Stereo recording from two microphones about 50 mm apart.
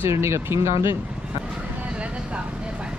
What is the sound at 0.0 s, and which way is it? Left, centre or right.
Speech, right.